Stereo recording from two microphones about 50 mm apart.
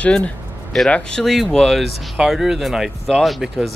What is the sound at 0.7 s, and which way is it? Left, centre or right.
Speech, centre.